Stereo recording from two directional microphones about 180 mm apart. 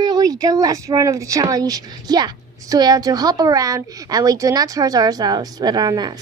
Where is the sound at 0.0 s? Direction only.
20° right (ahead or behind).